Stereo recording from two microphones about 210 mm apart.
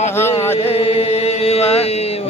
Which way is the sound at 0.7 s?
30° left (ahead or behind).